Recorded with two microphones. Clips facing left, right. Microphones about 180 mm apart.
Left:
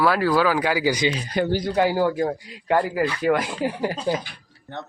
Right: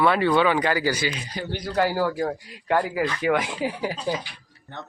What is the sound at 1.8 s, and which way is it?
Speech, 15° left (ahead or behind).